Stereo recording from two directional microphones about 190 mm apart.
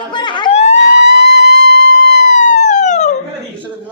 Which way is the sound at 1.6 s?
70° left (ahead or behind).